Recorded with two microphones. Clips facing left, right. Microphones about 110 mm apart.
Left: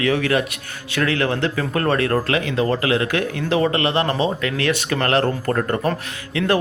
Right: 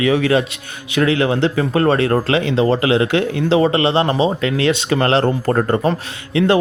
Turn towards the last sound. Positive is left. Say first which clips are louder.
# right 5 dB
turn(degrees=-25)  # may be behind; listen again after turning